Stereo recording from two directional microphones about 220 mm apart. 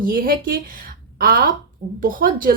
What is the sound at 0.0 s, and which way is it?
Speech, 40° right (ahead or behind).